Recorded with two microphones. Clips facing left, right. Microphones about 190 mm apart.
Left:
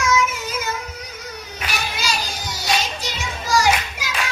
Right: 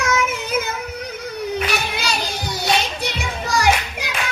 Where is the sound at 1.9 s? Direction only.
60° right (ahead or behind).